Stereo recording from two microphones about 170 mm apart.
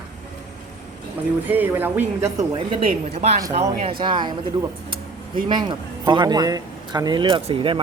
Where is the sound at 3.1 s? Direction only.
40° right (ahead or behind).